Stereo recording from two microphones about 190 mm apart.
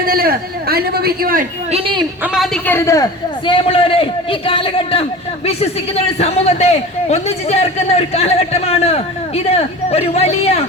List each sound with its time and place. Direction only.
0.0 s a man's voice: 50° right (ahead or behind)
1.7 s a man's voice: 25° right (ahead or behind)
2.2 s a woman's voice: centre (ahead or behind)
2.6 s a man's voice: 15° left (ahead or behind); by 10.6 s 35° left (ahead or behind)